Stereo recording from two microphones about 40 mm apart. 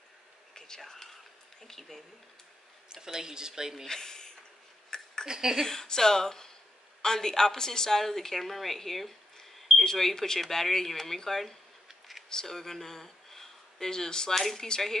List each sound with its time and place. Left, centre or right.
0.6 s speech: centre
2.9 s speech: centre
3.8 s speech: centre
5.2 s speech: centre
5.7 s a woman's voice: centre
14.3 s speech: centre